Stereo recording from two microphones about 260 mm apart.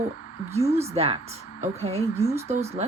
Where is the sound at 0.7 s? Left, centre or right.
Right.